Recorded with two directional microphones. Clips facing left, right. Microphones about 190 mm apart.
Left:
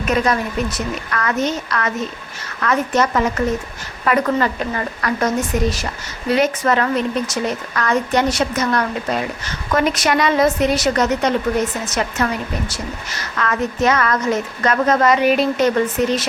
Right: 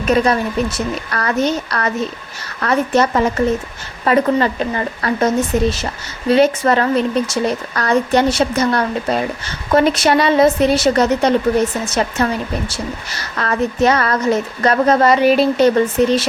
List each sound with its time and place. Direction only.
0.1 s a woman's voice: 30° right (ahead or behind)